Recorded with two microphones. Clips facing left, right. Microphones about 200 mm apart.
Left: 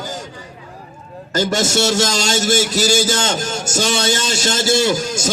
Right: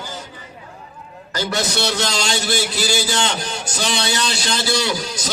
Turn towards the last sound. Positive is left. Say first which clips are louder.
# left 6 dB
turn(degrees=45)  # may be behind; listen again after turning